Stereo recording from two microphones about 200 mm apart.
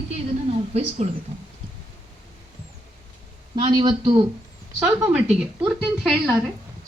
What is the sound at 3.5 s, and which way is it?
Speech, 25° right (ahead or behind).